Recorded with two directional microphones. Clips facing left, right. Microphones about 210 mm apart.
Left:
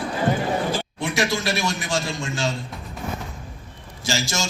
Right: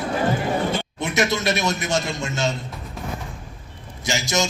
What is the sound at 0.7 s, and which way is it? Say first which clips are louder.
A man's voice: right 1 dB; 20° right (ahead or behind).